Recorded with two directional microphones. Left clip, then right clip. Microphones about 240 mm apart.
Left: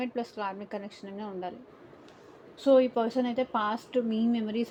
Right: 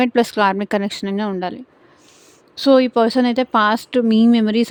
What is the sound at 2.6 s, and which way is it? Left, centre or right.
Speech, right.